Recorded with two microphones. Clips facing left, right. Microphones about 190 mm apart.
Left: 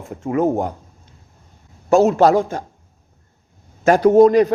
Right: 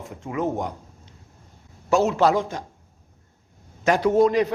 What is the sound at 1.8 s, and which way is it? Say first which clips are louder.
Speech: left 6 dB; 45° left (ahead or behind).